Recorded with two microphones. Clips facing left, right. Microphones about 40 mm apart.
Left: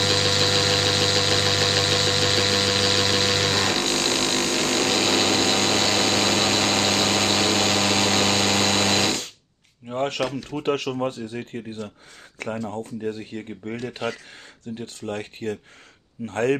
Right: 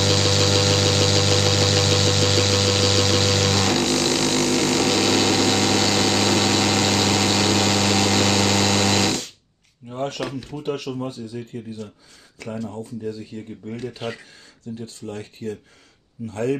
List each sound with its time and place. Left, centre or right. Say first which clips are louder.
0.0 s engine: right 2 dB; centre
3.8 s vehicle: right 3 dB; left
9.9 s a sound: left 2 dB; left
10.5 s speech: left 3 dB; left
14.8 s speech: left 4 dB; left